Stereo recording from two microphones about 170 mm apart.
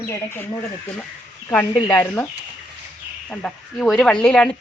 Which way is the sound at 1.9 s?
15° left (ahead or behind).